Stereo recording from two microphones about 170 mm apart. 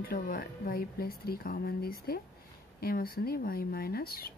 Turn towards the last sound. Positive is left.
turn(degrees=60)  # may be behind; listen again after turning